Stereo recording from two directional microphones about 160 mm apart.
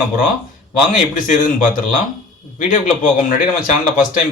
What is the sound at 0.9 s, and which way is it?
Speech, 55° left (ahead or behind).